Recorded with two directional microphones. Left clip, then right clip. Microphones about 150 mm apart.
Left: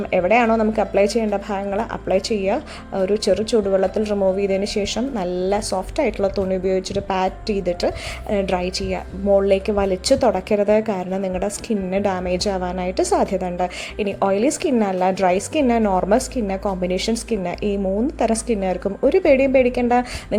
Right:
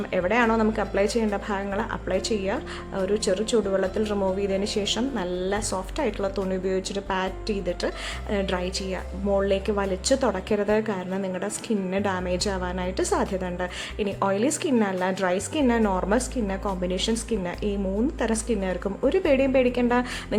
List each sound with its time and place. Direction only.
0.1 s a woman's voice: 20° left (ahead or behind)